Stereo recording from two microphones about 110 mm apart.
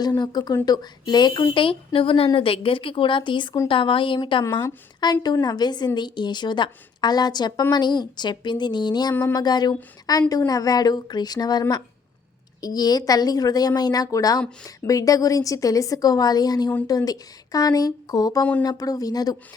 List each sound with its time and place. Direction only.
0.2 s a woman's voice: 40° left (ahead or behind)
5.2 s a woman's voice: 40° left (ahead or behind)
12.6 s a woman's voice: 35° left (ahead or behind)